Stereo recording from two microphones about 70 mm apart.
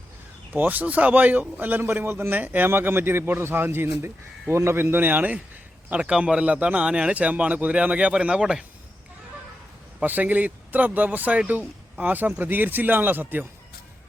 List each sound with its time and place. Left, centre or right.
0.5 s speech: right
5.9 s speech: centre
10.0 s speech: right